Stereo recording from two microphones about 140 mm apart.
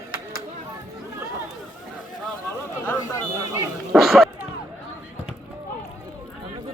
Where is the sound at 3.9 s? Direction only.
Centre (ahead or behind).